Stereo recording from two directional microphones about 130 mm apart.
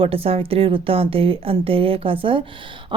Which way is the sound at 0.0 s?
45° right (ahead or behind).